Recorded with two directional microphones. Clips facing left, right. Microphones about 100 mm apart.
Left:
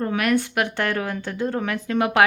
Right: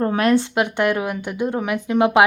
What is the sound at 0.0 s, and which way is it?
A woman's voice, 30° right (ahead or behind).